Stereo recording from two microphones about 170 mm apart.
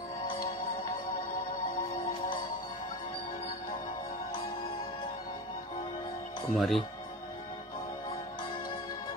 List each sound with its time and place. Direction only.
1.8 s music: 30° left (ahead or behind)
6.5 s speech: centre (ahead or behind)